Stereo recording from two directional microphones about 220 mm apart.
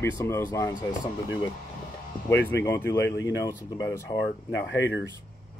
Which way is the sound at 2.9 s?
55° left (ahead or behind).